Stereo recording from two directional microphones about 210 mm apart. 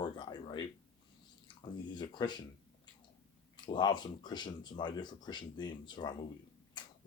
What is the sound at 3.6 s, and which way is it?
Speech, 20° left (ahead or behind).